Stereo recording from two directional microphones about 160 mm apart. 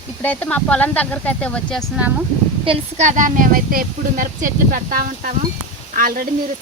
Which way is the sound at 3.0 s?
55° right (ahead or behind).